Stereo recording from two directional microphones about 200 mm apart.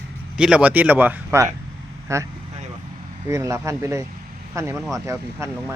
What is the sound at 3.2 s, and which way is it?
Speech, 15° right (ahead or behind).